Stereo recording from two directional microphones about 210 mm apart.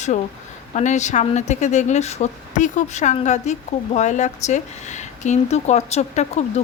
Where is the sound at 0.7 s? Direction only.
35° left (ahead or behind).